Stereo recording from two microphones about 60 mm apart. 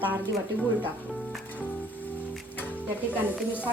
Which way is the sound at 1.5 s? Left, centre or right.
Left.